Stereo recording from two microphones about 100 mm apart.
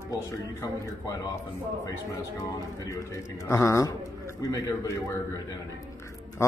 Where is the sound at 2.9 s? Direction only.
30° left (ahead or behind).